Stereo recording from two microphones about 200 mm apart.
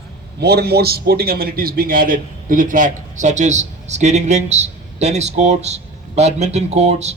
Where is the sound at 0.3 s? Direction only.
55° right (ahead or behind).